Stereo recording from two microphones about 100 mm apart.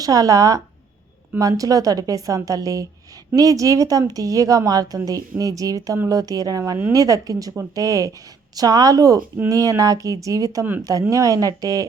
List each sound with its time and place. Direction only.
0.0 s a woman's voice: 35° right (ahead or behind)